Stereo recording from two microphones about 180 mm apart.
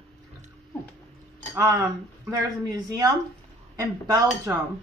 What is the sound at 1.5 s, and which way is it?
Speech, 15° right (ahead or behind).